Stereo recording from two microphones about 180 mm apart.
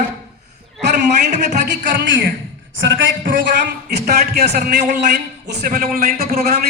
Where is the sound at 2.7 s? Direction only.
90° right.